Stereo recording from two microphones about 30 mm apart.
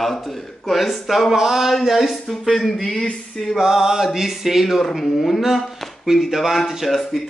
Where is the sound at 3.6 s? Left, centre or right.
Centre.